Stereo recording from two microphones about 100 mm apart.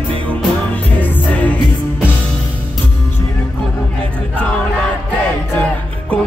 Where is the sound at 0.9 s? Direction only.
15° left (ahead or behind).